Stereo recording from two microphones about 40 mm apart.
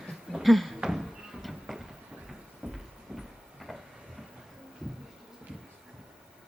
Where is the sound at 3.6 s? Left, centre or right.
Centre.